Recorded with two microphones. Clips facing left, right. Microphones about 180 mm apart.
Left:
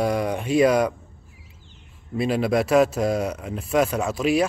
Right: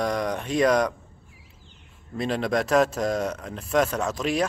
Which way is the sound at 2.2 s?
10° left (ahead or behind).